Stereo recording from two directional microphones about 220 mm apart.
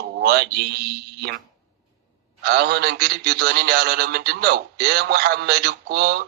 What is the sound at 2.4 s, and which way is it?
A man's voice, 45° right (ahead or behind).